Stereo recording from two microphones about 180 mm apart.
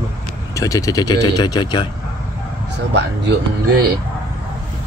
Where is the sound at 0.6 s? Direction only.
20° left (ahead or behind).